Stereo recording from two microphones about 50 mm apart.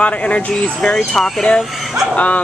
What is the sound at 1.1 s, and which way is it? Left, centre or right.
Speech, centre.